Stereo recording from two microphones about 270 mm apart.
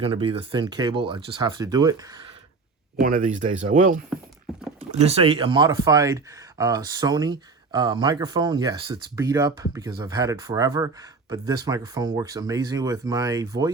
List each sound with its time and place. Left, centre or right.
0.0 s speech: right
3.0 s speech: right; by 13.7 s centre